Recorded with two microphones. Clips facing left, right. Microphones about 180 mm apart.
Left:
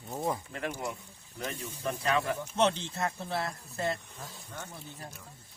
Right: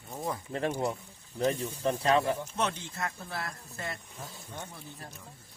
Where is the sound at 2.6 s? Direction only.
25° left (ahead or behind).